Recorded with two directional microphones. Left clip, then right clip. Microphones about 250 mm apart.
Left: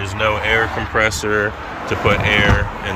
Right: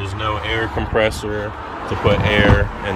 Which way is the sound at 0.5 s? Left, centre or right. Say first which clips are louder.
Left 4 dB; centre.